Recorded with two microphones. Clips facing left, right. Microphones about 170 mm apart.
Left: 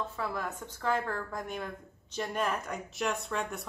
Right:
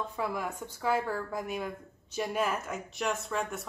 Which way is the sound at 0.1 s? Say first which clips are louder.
Right 2 dB; 15° right (ahead or behind).